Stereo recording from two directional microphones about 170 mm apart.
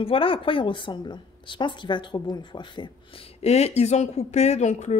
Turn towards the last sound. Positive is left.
turn(degrees=40)  # may be behind; listen again after turning